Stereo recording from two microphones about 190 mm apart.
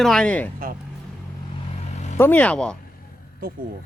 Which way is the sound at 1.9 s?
35° left (ahead or behind).